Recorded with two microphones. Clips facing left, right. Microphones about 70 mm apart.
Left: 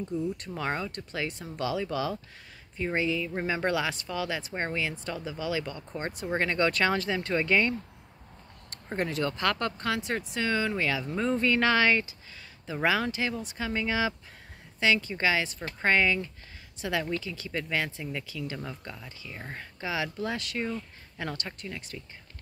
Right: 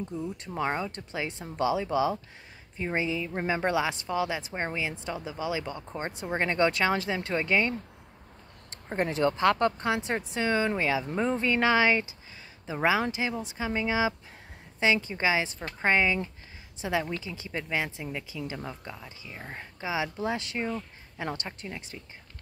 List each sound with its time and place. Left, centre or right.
0.2 s speech: right
8.9 s speech: right